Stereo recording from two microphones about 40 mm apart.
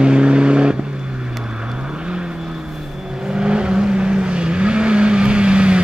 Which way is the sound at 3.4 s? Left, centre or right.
Right.